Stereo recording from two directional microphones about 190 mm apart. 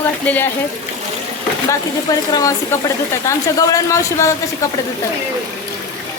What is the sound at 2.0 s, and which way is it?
A woman's voice, 20° left (ahead or behind).